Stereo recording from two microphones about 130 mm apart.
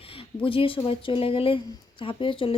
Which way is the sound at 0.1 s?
45° left (ahead or behind).